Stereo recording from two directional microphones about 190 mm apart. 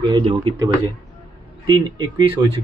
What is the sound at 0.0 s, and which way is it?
Speech, 25° right (ahead or behind).